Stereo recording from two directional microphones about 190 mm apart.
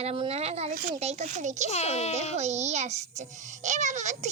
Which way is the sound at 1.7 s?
35° left (ahead or behind).